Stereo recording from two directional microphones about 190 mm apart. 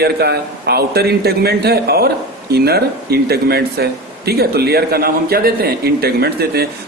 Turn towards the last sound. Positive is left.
turn(degrees=-55)  # may be behind; listen again after turning